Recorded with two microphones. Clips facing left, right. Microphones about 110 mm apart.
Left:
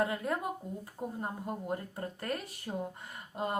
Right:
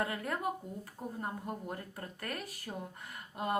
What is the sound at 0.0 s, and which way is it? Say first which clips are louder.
Speech: left 3 dB; 20° left (ahead or behind).